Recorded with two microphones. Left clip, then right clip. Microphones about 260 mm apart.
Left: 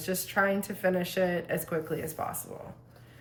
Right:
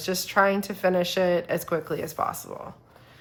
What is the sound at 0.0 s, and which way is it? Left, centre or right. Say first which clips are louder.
A woman's voice: right 6 dB; centre.